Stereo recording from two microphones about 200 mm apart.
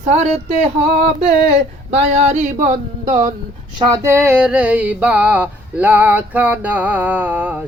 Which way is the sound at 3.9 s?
15° right (ahead or behind).